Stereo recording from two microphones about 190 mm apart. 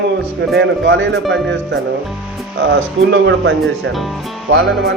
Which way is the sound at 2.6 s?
75° right (ahead or behind).